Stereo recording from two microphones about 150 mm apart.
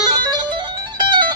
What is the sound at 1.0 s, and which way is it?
Music, 30° right (ahead or behind).